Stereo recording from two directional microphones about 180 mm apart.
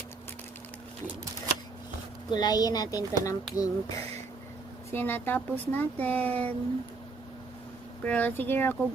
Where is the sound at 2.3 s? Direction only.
20° left (ahead or behind).